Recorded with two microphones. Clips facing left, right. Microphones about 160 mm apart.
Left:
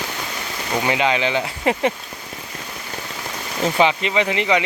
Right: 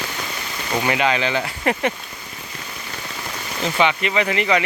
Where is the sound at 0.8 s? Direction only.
20° left (ahead or behind).